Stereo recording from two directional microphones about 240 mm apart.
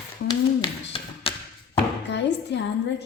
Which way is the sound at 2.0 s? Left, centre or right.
Left.